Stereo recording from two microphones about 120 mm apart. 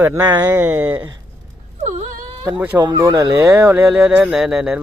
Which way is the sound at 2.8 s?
35° right (ahead or behind).